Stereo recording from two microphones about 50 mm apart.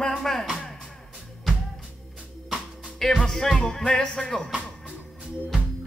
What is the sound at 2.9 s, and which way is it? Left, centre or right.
Speech, centre.